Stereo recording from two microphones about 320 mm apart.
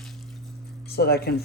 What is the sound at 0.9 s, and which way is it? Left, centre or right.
Speech, left.